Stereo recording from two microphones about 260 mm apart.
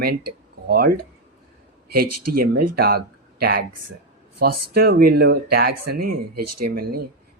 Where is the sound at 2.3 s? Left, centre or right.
Right.